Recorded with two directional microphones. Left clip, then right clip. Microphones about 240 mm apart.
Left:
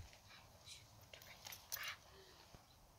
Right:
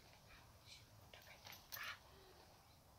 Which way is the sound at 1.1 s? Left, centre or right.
Left.